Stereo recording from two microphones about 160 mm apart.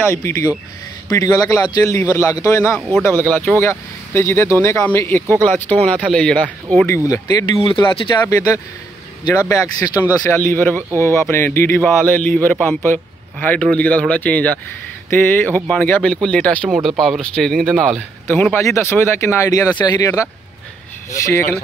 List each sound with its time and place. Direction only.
0.1 s a man's voice: 15° left (ahead or behind)
7.1 s a man's voice: 20° left (ahead or behind)
7.5 s speech: 35° left (ahead or behind)
9.2 s a man's voice: 20° left (ahead or behind)
10.2 s speech: 10° left (ahead or behind)
18.2 s speech: 10° left (ahead or behind)